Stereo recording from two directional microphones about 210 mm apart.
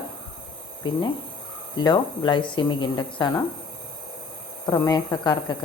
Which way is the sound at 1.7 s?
20° left (ahead or behind).